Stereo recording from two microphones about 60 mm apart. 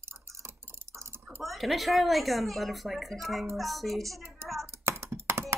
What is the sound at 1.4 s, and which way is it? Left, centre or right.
Speech, centre.